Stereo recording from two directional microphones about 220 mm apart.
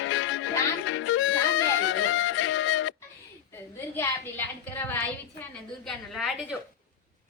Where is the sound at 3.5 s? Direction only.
10° left (ahead or behind).